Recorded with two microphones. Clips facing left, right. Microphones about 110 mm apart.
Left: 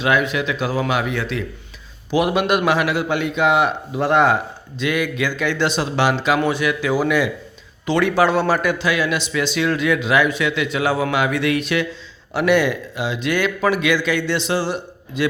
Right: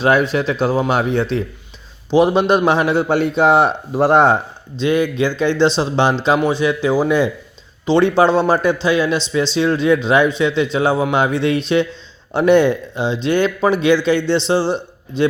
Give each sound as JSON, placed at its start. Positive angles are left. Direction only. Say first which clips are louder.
{"t": 0.0, "sound": "a man's voice", "louder": "right 4 dB", "side_deg": -35}